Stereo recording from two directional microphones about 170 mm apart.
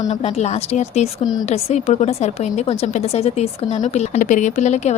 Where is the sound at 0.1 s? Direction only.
40° left (ahead or behind).